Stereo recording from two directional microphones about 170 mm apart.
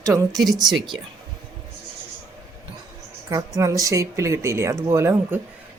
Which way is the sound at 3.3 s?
15° right (ahead or behind).